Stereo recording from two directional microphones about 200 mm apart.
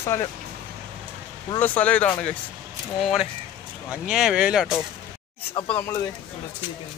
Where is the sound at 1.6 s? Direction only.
10° left (ahead or behind).